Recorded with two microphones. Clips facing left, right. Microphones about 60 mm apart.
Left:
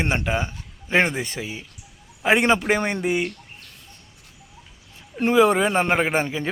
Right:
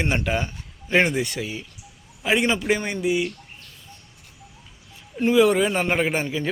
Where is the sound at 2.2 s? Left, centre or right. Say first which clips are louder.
Left 3 dB; left.